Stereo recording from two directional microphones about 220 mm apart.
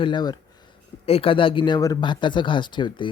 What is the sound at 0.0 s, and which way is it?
Speech, 20° left (ahead or behind).